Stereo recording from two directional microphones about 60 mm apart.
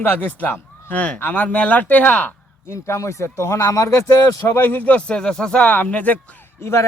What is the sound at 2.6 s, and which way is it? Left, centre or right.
A man's voice, left.